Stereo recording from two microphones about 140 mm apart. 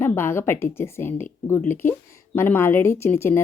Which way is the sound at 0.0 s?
15° left (ahead or behind).